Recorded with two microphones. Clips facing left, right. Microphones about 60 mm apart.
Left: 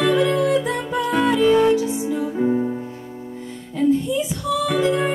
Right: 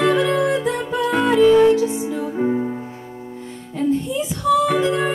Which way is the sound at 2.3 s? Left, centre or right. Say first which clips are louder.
Even; right.